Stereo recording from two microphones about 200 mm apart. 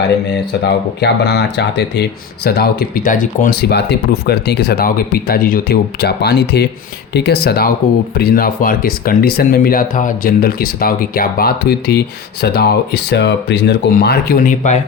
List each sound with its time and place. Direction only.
0.3 s speech: 55° left (ahead or behind); by 14.8 s 40° left (ahead or behind)